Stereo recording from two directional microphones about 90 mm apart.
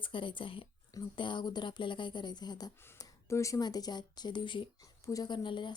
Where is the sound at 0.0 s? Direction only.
65° left (ahead or behind).